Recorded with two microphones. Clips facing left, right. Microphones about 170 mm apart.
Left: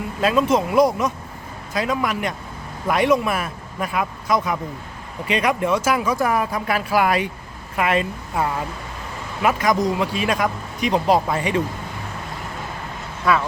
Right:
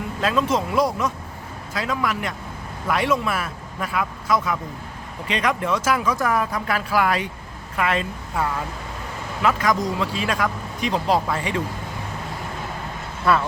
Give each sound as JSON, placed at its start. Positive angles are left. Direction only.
{"t": 0.2, "sound": "speech", "side_deg": 10}